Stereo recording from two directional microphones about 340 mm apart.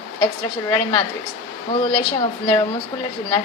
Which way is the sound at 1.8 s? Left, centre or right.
Centre.